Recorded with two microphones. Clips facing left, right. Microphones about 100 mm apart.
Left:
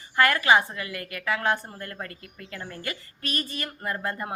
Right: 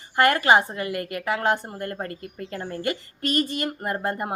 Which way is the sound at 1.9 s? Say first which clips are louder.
Right 6 dB; 35° right (ahead or behind).